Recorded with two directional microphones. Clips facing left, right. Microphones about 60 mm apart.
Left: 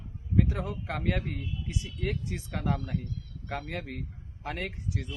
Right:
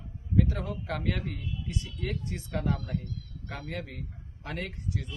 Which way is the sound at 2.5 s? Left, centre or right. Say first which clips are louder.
Right 1 dB; left.